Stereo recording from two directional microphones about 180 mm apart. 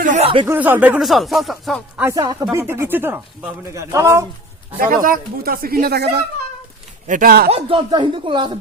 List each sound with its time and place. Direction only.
0.0 s a sound: 45° right (ahead or behind)
0.4 s speech: 10° right (ahead or behind)
2.0 s speech: 20° right (ahead or behind)
5.0 s speech: 50° right (ahead or behind)
7.1 s speech: 50° right (ahead or behind)
7.5 s speech: 25° right (ahead or behind)